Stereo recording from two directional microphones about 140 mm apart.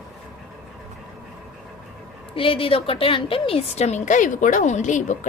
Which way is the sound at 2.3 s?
40° left (ahead or behind).